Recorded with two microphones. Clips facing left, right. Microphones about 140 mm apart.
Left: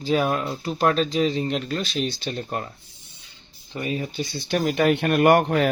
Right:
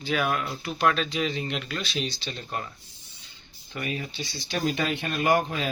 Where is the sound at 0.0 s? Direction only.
35° left (ahead or behind).